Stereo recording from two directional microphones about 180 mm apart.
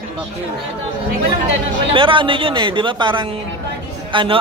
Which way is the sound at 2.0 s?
30° right (ahead or behind).